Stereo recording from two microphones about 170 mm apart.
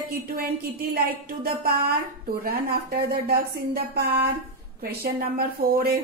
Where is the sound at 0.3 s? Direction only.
60° right (ahead or behind).